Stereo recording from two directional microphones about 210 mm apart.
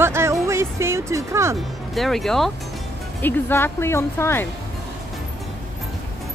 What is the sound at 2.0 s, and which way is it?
Speech, centre (ahead or behind).